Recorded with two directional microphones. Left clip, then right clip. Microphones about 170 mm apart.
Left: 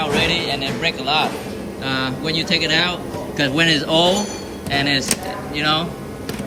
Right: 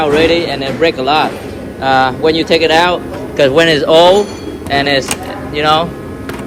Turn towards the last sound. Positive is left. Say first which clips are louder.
# right 8 dB
turn(degrees=0)  # may be behind; listen again after turning